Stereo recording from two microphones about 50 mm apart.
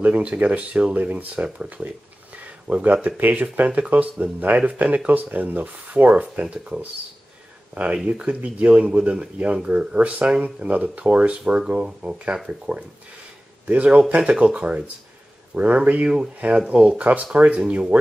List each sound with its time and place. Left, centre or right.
0.1 s speech: right
2.3 s a sound: right
3.2 s speech: right
8.0 s speech: centre
8.3 s speech: right